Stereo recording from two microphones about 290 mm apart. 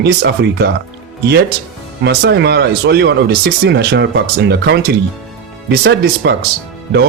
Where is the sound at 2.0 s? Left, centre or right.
Right.